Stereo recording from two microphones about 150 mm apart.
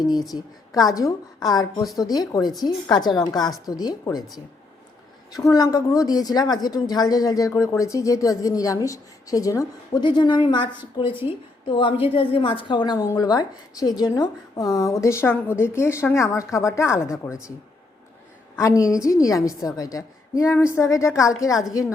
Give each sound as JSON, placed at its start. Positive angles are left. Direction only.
{"t": 0.3, "sound": "a woman's voice", "side_deg": 25}
{"t": 5.3, "sound": "a woman's voice", "side_deg": 25}
{"t": 18.6, "sound": "a woman's voice", "side_deg": 20}